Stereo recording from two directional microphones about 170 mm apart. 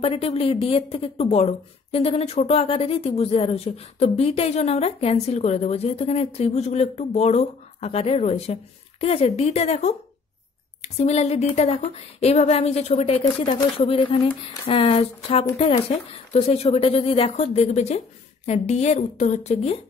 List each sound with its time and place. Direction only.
0.0 s speech: 35° left (ahead or behind)